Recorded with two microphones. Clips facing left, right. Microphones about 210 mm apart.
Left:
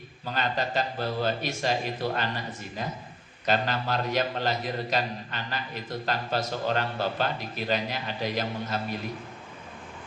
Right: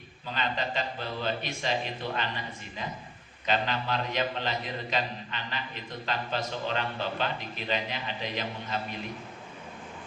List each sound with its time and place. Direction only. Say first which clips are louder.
0.3 s a man's voice: left 3 dB; 40° left (ahead or behind)
3.4 s a man's voice: left 2 dB; 40° left (ahead or behind)